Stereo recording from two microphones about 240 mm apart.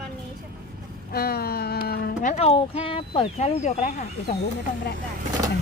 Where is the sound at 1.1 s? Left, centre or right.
Left.